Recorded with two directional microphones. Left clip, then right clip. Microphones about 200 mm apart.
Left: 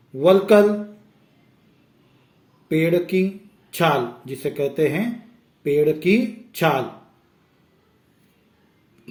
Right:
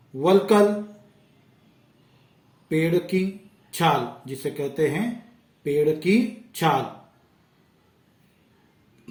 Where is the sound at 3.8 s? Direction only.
20° left (ahead or behind).